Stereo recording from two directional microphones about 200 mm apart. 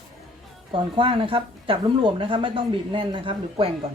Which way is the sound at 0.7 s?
25° right (ahead or behind).